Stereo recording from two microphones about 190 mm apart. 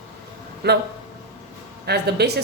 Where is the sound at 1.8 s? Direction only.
60° right (ahead or behind).